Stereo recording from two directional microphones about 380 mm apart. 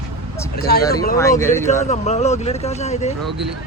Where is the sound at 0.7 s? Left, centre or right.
Left.